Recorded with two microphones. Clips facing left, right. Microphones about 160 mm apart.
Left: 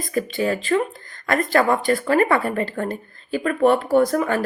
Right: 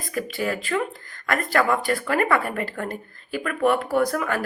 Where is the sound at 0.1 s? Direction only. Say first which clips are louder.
Left 4 dB; 25° left (ahead or behind).